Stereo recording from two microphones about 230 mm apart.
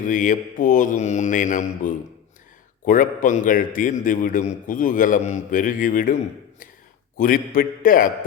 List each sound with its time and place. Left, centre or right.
0.0 s a man's voice: left
7.2 s a man's voice: left